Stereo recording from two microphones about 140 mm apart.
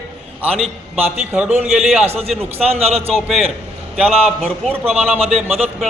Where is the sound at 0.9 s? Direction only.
10° right (ahead or behind).